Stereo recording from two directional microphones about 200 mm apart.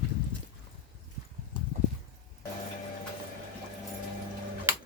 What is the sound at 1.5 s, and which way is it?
Clip-clop, 20° left (ahead or behind).